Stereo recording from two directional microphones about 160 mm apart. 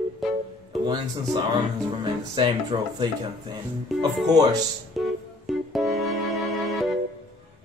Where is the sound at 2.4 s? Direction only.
30° right (ahead or behind).